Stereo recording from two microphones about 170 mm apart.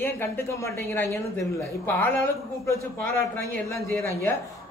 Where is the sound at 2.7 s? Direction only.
15° left (ahead or behind).